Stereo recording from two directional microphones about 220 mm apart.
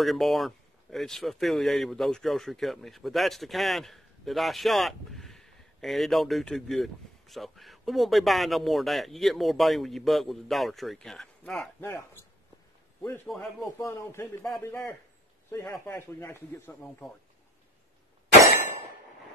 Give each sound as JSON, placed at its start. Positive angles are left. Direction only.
{"t": 0.0, "sound": "a man's voice", "side_deg": 0}